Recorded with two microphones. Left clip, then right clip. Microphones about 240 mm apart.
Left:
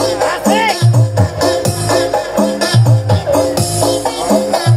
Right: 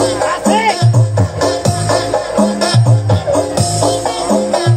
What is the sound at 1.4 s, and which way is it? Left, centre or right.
Music, left.